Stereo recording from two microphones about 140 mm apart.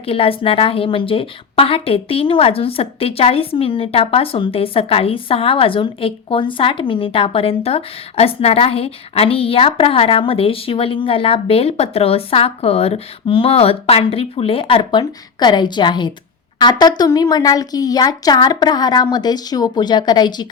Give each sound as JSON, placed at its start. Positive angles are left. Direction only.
{"t": 0.0, "sound": "a woman's voice", "side_deg": 40}